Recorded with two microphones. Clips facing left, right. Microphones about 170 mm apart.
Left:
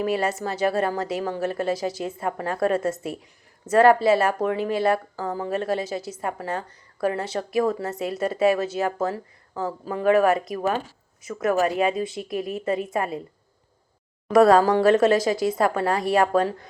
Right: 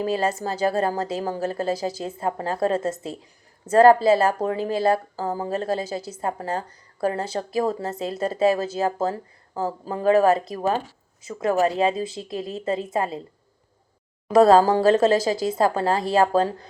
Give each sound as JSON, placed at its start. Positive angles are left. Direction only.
{"t": 0.0, "sound": "speech", "side_deg": -30}
{"t": 14.3, "sound": "speech", "side_deg": -25}